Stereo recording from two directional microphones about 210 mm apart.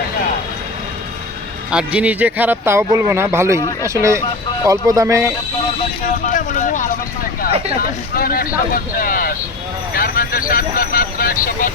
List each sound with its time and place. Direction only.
1.7 s speech: 5° right (ahead or behind)
3.6 s speech: 20° left (ahead or behind)
3.8 s speech: 15° right (ahead or behind)
6.2 s speech: 35° left (ahead or behind)